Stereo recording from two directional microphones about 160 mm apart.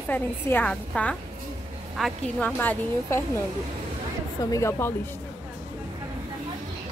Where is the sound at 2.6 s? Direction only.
15° left (ahead or behind).